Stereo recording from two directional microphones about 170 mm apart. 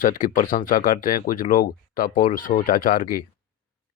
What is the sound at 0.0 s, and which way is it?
Speech, 50° left (ahead or behind).